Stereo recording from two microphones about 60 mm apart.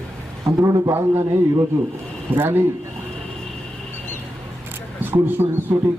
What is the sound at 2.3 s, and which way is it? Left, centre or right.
Speech, right.